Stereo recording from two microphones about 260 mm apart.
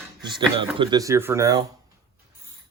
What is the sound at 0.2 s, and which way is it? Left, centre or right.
Speech, centre.